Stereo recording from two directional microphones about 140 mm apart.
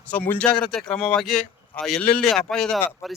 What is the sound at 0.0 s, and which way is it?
Speech, 10° left (ahead or behind).